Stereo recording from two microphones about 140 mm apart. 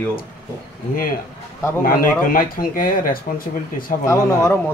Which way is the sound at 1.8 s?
90° left.